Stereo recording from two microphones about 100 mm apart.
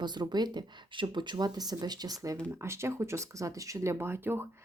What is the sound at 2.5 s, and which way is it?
Speech, 25° right (ahead or behind).